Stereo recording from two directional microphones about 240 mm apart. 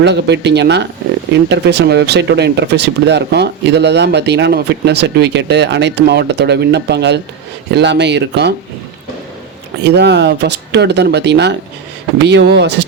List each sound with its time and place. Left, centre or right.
0.0 s speech: right
9.8 s speech: right